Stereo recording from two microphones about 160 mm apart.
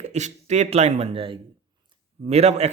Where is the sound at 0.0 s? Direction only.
45° right (ahead or behind).